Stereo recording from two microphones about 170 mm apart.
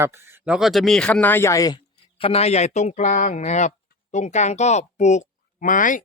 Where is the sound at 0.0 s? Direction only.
15° right (ahead or behind).